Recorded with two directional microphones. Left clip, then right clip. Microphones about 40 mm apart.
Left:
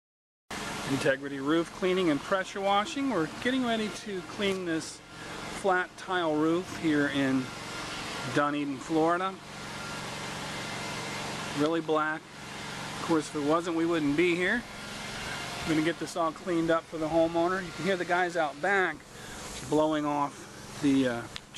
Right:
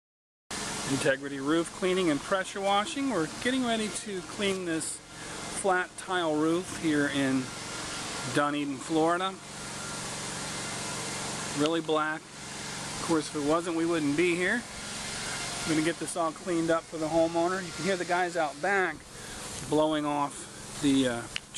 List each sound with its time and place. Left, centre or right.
0.5 s speech: left
6.7 s a sound: left
8.3 s speech: centre
9.8 s vehicle: left
11.6 s speech: centre
20.8 s speech: centre